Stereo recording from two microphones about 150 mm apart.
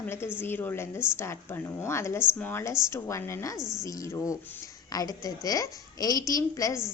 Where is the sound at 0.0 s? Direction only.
15° left (ahead or behind).